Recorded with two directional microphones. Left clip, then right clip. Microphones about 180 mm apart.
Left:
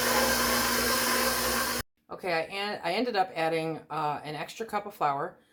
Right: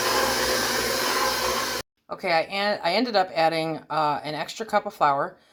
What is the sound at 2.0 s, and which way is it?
Speech, 35° right (ahead or behind).